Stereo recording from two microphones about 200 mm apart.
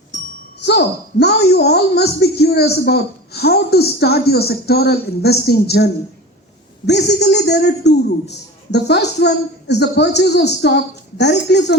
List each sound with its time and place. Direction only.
0.6 s a woman's voice: 55° left (ahead or behind)